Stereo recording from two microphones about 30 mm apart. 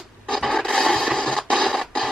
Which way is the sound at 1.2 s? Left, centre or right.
Centre.